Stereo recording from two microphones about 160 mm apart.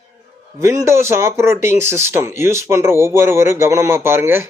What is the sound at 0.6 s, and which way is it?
Speech, 20° right (ahead or behind).